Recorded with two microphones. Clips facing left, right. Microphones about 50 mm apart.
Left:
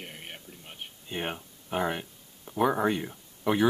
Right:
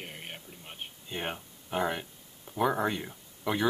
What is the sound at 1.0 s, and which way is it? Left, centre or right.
Speech, centre.